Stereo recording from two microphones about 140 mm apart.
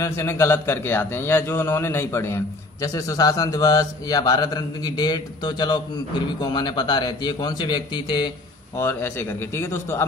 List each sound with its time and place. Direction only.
0.0 s a man's voice: 20° left (ahead or behind)
8.7 s a man's voice: 15° left (ahead or behind)